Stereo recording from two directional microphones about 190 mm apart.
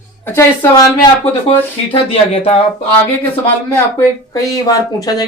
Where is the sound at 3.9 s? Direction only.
20° left (ahead or behind).